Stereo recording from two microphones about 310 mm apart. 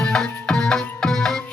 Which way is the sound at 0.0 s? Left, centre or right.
Centre.